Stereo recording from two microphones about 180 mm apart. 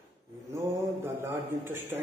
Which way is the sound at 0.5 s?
15° right (ahead or behind).